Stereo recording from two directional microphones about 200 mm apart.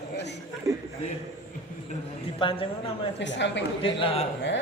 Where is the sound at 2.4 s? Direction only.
25° left (ahead or behind).